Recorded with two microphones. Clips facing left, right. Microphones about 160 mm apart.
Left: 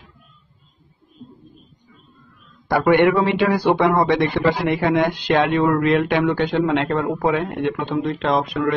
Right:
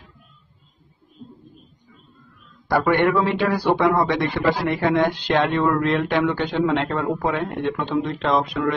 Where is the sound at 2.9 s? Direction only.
15° left (ahead or behind).